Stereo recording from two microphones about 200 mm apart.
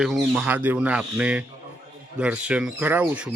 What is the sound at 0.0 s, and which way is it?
A man's voice, 5° right (ahead or behind).